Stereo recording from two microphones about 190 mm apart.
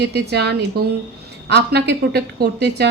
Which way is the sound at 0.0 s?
60° right (ahead or behind).